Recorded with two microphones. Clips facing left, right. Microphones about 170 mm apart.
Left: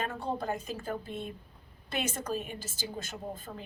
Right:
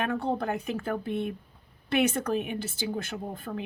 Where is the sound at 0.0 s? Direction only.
65° right (ahead or behind).